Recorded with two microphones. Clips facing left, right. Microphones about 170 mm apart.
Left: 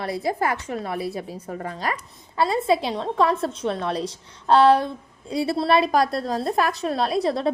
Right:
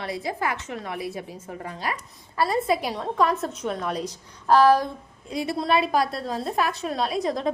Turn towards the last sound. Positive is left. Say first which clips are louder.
# left 3 dB
turn(degrees=35)  # may be behind; listen again after turning